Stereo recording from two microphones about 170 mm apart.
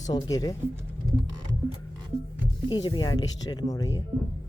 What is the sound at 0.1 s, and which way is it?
Speech, 20° left (ahead or behind).